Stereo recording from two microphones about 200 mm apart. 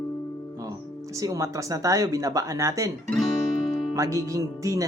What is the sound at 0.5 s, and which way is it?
Speech, 15° right (ahead or behind).